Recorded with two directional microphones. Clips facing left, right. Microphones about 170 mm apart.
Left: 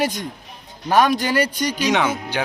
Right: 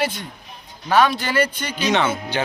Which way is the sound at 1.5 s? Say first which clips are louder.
Left 1 dB; 10° left (ahead or behind).